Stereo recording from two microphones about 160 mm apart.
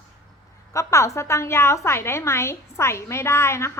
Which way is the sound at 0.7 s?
20° left (ahead or behind).